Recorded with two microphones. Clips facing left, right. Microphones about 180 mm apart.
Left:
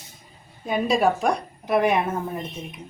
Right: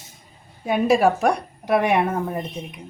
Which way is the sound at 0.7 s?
65° right (ahead or behind).